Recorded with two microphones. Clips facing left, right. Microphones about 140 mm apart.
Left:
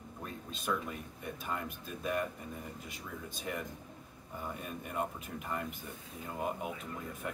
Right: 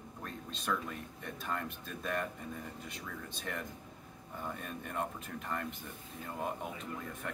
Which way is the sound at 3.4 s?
5° left (ahead or behind).